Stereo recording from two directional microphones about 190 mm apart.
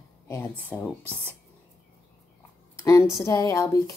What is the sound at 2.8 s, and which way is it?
A woman's voice, 15° left (ahead or behind).